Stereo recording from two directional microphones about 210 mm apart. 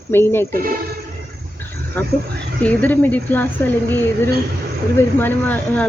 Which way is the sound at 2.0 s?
10° left (ahead or behind).